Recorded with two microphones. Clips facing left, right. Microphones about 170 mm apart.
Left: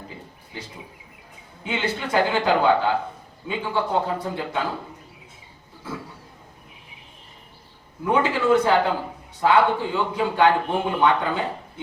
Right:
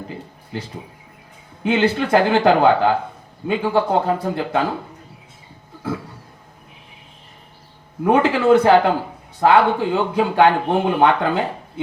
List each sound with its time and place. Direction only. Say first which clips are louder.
1.6 s speech: right 9 dB; 65° right (ahead or behind)
8.0 s speech: right 5 dB; 70° right (ahead or behind)